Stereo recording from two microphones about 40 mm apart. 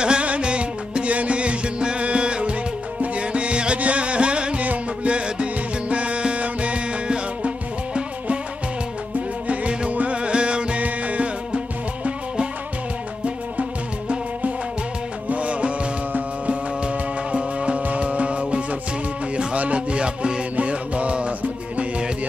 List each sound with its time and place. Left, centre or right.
0.0 s music: right
9.5 s music: right